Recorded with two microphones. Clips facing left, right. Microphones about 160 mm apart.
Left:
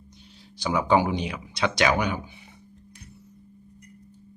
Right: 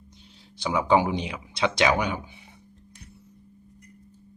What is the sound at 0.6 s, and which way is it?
Speech, 25° right (ahead or behind).